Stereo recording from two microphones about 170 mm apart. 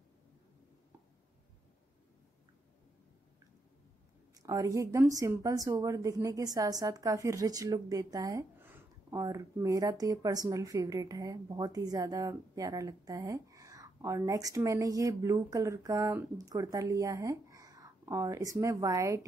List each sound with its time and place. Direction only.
4.4 s a woman's voice: 20° right (ahead or behind)